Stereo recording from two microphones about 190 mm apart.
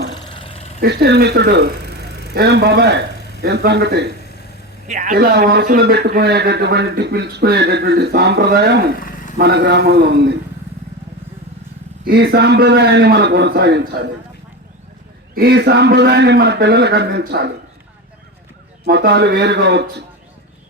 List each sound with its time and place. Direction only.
0.3 s a sound: 30° left (ahead or behind)
0.8 s a man's voice: 60° right (ahead or behind)
4.9 s a man's voice: 45° right (ahead or behind); by 8.8 s 60° right (ahead or behind)
9.0 s a sound: 50° left (ahead or behind)
9.4 s a man's voice: 60° right (ahead or behind)
12.0 s a man's voice: 60° right (ahead or behind)
15.4 s a man's voice: 60° right (ahead or behind)
18.9 s a man's voice: 60° right (ahead or behind)